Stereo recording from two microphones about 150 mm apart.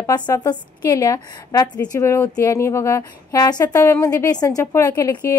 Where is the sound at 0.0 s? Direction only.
25° left (ahead or behind).